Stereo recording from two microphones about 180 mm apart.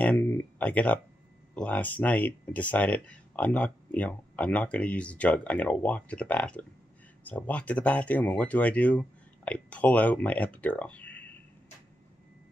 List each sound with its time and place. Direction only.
0.0 s speech: 10° left (ahead or behind)